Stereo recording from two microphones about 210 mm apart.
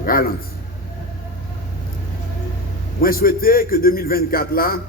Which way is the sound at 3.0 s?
45° left (ahead or behind).